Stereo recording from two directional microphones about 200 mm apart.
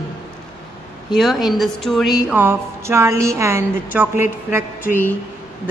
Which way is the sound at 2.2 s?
10° right (ahead or behind).